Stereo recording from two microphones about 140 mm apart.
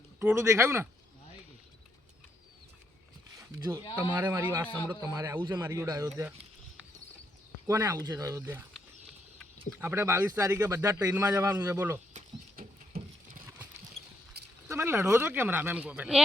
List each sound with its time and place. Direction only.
0.3 s speech: 20° right (ahead or behind)
3.3 s speech: 20° right (ahead or behind)
7.7 s speech: 25° right (ahead or behind)
9.8 s speech: 15° right (ahead or behind)
12.1 s a sound: 55° right (ahead or behind)
12.5 s a sound: 90° right
14.7 s speech: 15° right (ahead or behind)